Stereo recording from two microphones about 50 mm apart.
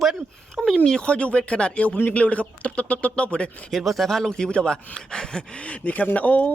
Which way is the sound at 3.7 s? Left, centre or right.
Centre.